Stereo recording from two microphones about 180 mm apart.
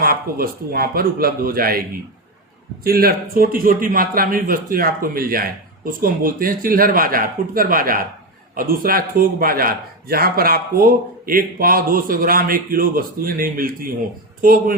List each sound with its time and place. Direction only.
0.0 s a man's voice: 55° right (ahead or behind)